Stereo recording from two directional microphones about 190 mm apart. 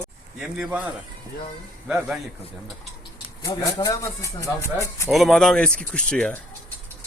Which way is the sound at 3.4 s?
20° left (ahead or behind).